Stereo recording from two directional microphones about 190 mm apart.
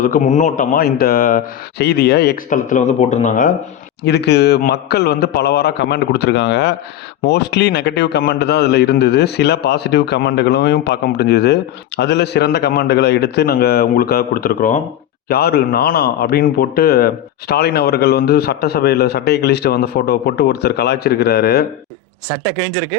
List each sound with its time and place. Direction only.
0.0 s speech: 40° left (ahead or behind)
1.8 s speech: 60° left (ahead or behind); by 3.5 s 40° left (ahead or behind)
4.0 s a man's voice: 60° left (ahead or behind)
15.3 s a man's voice: 60° left (ahead or behind)